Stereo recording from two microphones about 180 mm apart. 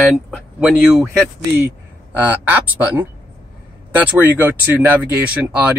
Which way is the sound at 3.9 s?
10° right (ahead or behind).